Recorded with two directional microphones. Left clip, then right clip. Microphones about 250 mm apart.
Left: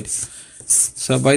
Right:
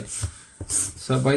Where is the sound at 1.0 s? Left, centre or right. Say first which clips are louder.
Left 6 dB; left.